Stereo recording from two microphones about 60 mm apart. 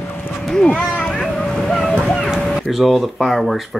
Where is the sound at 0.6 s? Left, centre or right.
Centre.